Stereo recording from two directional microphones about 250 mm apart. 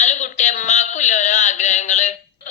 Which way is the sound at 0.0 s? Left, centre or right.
Left.